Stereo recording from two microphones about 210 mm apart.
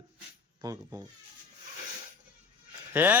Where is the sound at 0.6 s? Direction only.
15° right (ahead or behind).